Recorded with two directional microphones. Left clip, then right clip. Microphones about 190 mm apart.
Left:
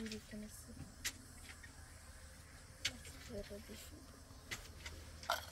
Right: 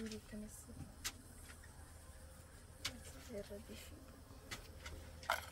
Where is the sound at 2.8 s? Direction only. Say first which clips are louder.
Left 4 dB; 30° right (ahead or behind).